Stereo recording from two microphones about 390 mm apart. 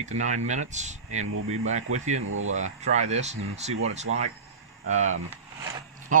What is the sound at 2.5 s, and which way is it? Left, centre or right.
Speech, centre.